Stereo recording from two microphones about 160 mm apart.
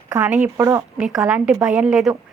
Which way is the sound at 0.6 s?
20° right (ahead or behind).